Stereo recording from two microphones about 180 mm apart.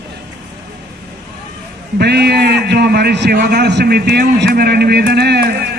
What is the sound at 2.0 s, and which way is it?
A man's voice, 65° right (ahead or behind).